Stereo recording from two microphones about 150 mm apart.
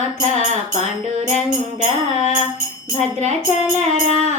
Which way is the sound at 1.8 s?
45° right (ahead or behind).